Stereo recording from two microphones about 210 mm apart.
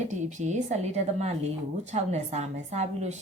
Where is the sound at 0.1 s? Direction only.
35° right (ahead or behind).